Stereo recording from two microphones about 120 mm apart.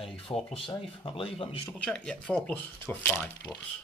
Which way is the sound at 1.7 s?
10° left (ahead or behind).